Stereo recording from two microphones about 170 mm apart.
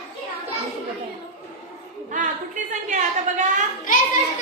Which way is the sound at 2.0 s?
50° right (ahead or behind).